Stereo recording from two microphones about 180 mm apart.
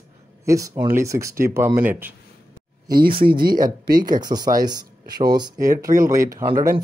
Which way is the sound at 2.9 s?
55° right (ahead or behind).